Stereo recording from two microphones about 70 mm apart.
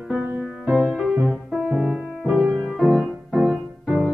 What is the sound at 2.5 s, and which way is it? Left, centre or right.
Music, centre.